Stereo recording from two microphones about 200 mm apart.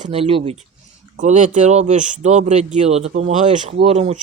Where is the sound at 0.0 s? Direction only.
30° right (ahead or behind).